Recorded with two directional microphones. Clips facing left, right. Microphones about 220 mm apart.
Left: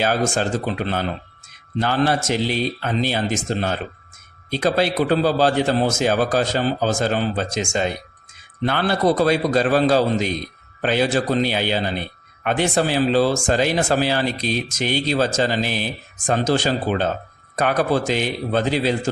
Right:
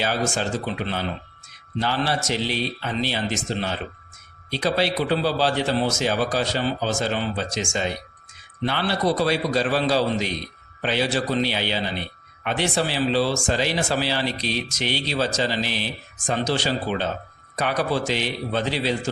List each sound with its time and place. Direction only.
0.0 s speech: 50° left (ahead or behind)